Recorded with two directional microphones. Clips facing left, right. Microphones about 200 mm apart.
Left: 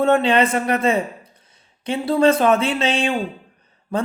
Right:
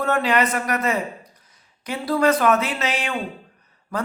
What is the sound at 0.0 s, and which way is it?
A man's voice, 25° left (ahead or behind).